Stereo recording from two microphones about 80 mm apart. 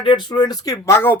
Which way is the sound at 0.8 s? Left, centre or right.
Left.